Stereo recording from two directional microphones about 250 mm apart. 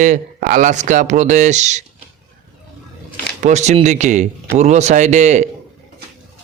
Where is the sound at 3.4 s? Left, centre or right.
Right.